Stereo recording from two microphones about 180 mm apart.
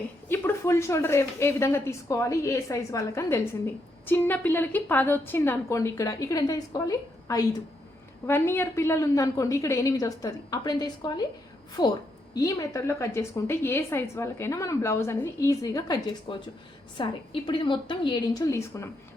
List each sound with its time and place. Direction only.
0.3 s a woman's voice: 15° left (ahead or behind)